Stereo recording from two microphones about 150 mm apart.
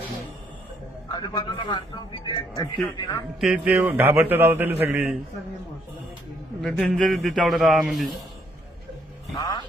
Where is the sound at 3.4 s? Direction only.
5° right (ahead or behind).